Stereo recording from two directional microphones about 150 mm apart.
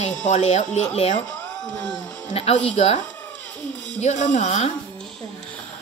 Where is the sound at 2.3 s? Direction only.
40° left (ahead or behind).